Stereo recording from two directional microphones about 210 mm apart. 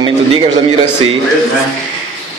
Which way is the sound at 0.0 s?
25° right (ahead or behind).